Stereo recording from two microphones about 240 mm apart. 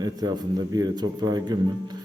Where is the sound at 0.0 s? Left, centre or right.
Centre.